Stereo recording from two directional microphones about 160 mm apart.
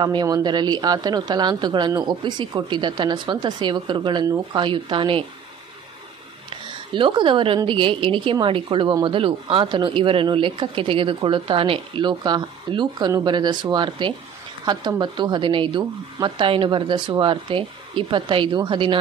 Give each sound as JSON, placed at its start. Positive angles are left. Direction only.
{"t": 0.0, "sound": "a woman's voice", "side_deg": -25}
{"t": 6.5, "sound": "a woman's voice", "side_deg": -30}